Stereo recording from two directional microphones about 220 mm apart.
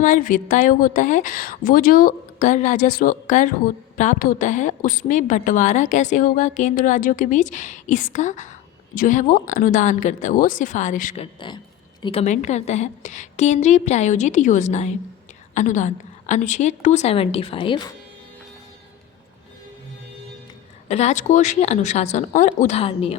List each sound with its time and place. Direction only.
0.0 s a woman's voice: 35° left (ahead or behind)
11.3 s a woman's voice: 20° left (ahead or behind)
20.8 s a woman's voice: 30° left (ahead or behind)